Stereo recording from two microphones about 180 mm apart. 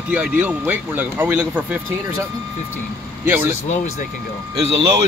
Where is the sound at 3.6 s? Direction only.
40° left (ahead or behind).